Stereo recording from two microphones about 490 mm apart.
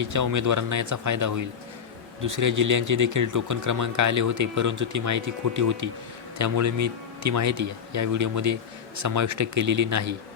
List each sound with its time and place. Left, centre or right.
0.0 s speech: right